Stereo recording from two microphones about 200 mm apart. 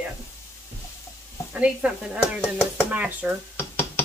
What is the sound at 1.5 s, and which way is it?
Speech, 5° right (ahead or behind).